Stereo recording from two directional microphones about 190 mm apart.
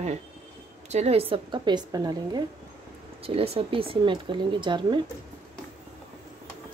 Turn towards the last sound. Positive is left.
turn(degrees=-25)  # may be behind; listen again after turning